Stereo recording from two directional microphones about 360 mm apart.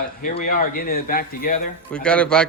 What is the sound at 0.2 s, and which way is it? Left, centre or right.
Speech, left.